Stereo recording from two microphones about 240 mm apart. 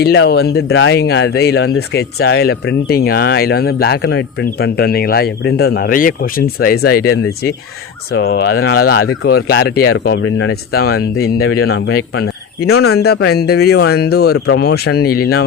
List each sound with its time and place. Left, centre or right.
0.0 s speech: left
6.8 s speech: left
8.1 s speech: left
12.6 s speech: left
12.9 s speech: left